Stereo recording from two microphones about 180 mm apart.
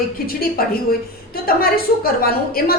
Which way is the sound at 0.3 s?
55° left (ahead or behind).